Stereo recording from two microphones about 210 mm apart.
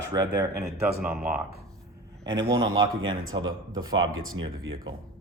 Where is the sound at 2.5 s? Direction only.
65° right (ahead or behind).